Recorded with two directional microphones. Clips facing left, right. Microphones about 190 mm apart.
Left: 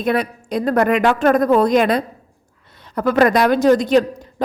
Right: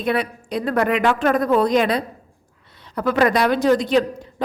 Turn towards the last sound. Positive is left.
turn(degrees=45)  # may be behind; listen again after turning